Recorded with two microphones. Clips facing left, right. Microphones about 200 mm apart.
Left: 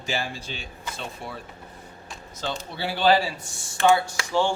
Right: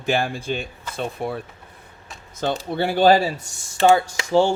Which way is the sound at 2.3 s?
55° right (ahead or behind).